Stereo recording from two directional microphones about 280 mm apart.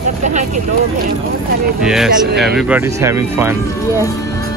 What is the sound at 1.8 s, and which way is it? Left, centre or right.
Speech, centre.